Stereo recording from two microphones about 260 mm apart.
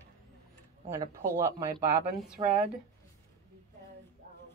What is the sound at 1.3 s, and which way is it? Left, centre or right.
A woman's voice, centre.